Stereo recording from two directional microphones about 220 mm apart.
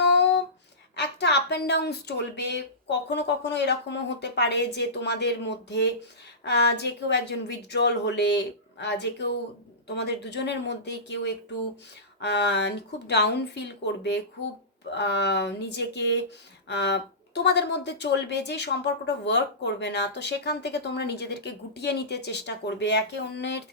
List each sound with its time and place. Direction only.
0.9 s a woman's voice: 50° left (ahead or behind)